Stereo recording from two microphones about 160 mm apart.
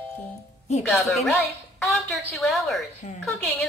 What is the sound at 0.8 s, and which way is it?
A woman's voice, centre (ahead or behind).